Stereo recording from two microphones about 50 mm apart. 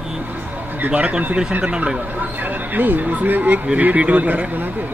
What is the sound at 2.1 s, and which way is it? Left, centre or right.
Speech, right.